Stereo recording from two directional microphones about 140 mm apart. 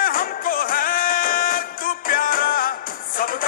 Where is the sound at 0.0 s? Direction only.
90° left.